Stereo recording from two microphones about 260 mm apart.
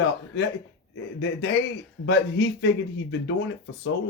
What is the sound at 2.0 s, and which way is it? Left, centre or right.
Speech, left.